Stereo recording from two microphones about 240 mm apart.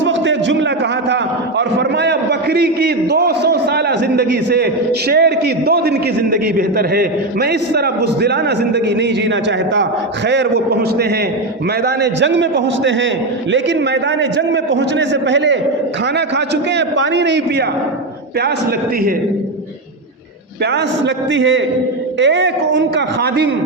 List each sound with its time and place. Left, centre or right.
0.0 s a sound: right
1.1 s a man's voice: right
20.7 s a man's voice: right